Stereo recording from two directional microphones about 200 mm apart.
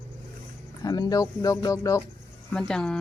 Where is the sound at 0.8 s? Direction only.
20° left (ahead or behind).